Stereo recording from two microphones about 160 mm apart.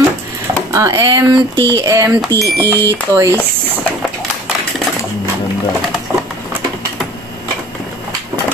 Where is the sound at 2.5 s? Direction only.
15° left (ahead or behind).